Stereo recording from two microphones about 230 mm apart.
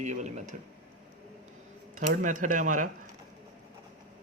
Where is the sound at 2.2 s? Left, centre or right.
Right.